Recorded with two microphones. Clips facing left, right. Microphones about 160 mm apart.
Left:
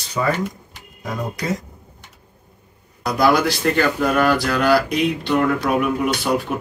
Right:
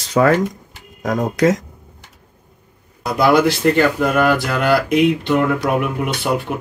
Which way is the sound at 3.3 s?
20° right (ahead or behind).